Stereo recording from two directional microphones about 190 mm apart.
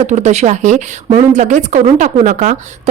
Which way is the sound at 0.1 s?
40° right (ahead or behind).